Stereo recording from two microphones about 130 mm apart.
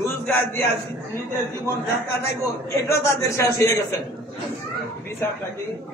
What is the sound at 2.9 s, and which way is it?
Speech, 25° left (ahead or behind).